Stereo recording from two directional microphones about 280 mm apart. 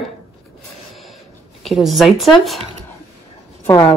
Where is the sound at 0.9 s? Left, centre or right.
Centre.